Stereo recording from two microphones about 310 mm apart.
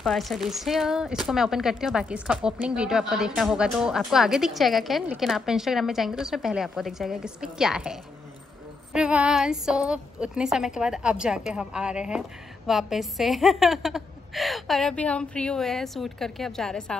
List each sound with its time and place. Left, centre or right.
0.0 s a woman's voice: centre